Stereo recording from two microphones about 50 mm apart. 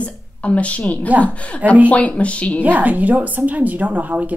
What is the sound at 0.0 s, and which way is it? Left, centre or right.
A woman's voice, left.